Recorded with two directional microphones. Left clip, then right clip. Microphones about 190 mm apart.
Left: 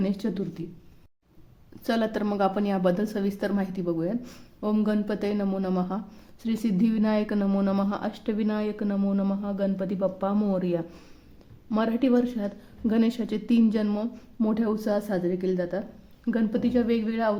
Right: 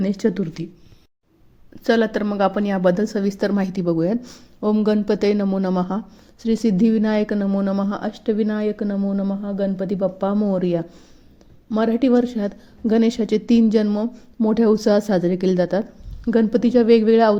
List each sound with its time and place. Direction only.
0.0 s a woman's voice: 30° right (ahead or behind)
1.8 s a woman's voice: 20° right (ahead or behind)
4.2 s a woman's voice: 15° right (ahead or behind)
7.3 s speech: 10° right (ahead or behind)
7.9 s a woman's voice: 20° right (ahead or behind)
9.0 s speech: 10° right (ahead or behind)
9.4 s a woman's voice: 20° right (ahead or behind)
14.5 s a woman's voice: 30° right (ahead or behind)